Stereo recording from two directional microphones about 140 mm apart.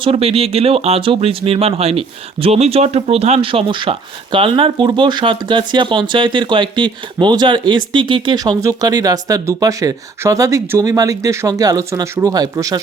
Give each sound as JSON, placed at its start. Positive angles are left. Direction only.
{"t": 0.0, "sound": "speech", "side_deg": -45}